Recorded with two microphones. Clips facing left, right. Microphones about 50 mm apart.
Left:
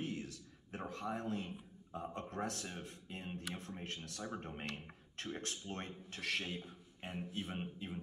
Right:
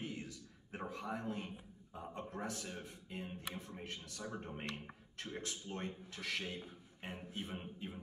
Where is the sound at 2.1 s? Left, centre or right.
Left.